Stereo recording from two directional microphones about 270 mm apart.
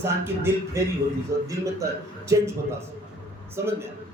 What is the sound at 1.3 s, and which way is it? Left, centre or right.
Speech, right.